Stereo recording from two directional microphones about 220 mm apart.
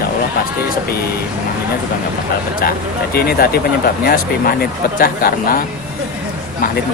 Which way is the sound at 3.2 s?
45° left (ahead or behind).